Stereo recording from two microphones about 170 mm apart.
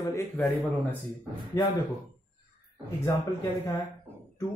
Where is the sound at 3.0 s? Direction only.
15° left (ahead or behind).